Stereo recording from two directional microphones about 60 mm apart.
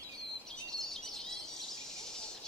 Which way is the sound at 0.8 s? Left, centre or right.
Centre.